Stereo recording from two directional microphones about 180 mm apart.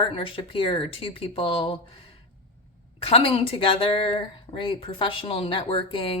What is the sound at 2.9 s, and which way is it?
Speech, 30° left (ahead or behind).